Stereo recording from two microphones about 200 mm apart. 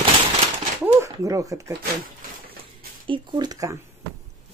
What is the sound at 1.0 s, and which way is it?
Speech, 15° right (ahead or behind).